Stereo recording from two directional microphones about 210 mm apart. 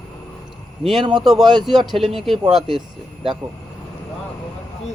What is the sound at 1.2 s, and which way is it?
Speech, centre (ahead or behind).